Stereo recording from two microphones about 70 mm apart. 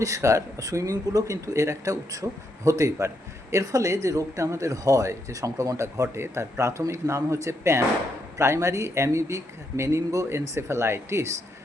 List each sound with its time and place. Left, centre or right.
0.0 s speech: right